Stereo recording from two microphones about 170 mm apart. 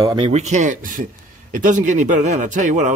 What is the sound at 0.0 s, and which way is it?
Speech, 25° right (ahead or behind).